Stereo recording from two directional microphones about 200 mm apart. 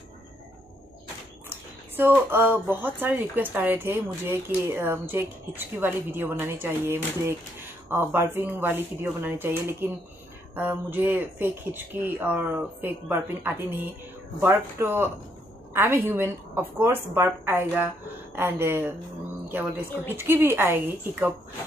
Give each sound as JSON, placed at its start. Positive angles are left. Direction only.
{"t": 2.0, "sound": "speech", "side_deg": -10}
{"t": 20.2, "sound": "speech", "side_deg": -10}